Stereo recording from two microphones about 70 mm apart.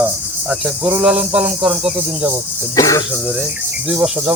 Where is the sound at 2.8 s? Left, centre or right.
Left.